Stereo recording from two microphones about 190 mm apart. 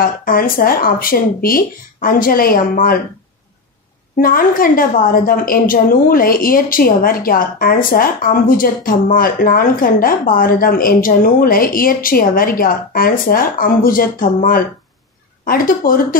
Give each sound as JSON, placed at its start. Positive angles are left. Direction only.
{"t": 0.0, "sound": "a woman's voice", "side_deg": 50}
{"t": 4.2, "sound": "a woman's voice", "side_deg": 45}